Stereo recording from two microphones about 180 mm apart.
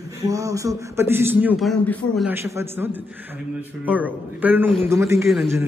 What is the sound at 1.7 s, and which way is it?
Speech, 5° left (ahead or behind).